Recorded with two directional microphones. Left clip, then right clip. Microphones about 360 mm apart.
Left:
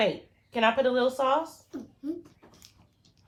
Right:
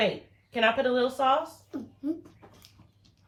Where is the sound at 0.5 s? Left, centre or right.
Centre.